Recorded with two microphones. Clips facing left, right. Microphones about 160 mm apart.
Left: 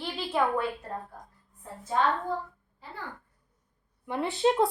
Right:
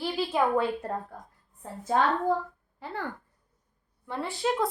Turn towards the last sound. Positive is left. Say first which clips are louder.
# left 4 dB
turn(degrees=25)  # may be behind; listen again after turning